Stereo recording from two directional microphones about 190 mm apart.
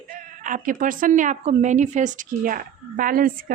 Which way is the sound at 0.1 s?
45° right (ahead or behind).